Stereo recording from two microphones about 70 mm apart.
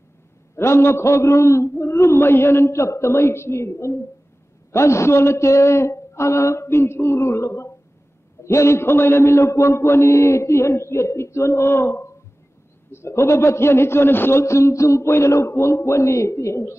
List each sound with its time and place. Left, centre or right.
0.6 s a man's voice: left